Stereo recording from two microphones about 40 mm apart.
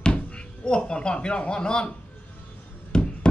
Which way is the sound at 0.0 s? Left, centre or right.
Left.